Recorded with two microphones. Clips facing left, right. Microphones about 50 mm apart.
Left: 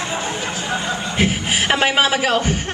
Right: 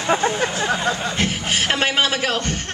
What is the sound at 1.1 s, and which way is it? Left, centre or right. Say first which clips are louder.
Speech: left 3 dB; centre.